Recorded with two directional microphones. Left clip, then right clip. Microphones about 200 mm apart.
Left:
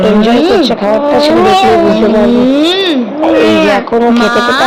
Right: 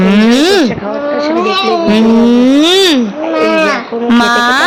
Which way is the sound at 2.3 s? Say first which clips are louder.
Even; 40° right (ahead or behind).